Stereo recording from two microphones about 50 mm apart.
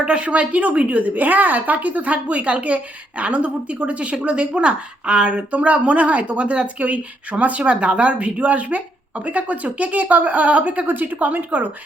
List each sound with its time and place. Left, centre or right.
0.0 s a woman's voice: right